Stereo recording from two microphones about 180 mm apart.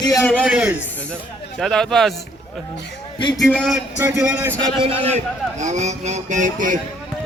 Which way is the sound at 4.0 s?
15° right (ahead or behind).